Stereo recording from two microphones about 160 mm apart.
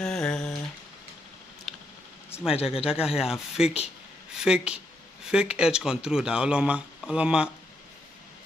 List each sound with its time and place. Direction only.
0.0 s humming: 5° left (ahead or behind)
1.7 s a sound: centre (ahead or behind)
2.5 s speech: 40° left (ahead or behind)
2.9 s speech: 5° right (ahead or behind)